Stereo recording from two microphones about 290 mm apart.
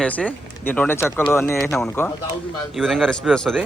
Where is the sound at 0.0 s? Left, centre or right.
Centre.